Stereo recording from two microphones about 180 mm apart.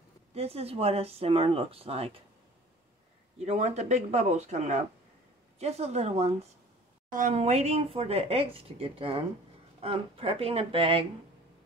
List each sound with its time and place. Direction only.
0.3 s speech: 35° right (ahead or behind)
3.4 s speech: 35° right (ahead or behind)